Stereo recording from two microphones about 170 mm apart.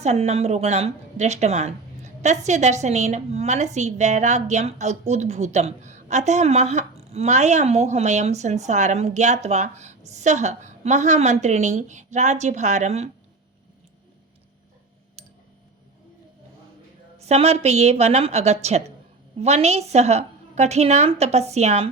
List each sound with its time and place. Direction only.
0.0 s a woman's voice: 40° right (ahead or behind)
17.2 s a woman's voice: 40° right (ahead or behind)